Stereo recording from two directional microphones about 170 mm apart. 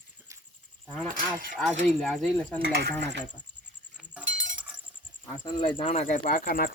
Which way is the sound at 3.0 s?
90° right.